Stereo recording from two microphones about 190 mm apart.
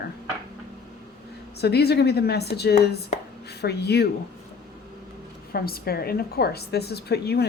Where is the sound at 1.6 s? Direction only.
60° left (ahead or behind).